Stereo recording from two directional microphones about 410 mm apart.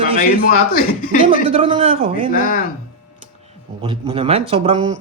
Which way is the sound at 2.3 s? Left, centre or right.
Centre.